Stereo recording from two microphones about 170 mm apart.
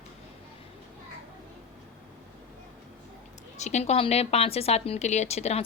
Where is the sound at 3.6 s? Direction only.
40° left (ahead or behind).